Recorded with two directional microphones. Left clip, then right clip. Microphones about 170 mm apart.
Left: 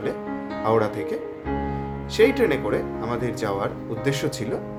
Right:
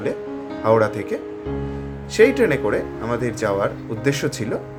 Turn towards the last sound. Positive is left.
turn(degrees=-15)  # may be behind; listen again after turning